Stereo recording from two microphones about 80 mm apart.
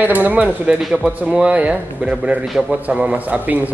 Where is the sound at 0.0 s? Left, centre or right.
Right.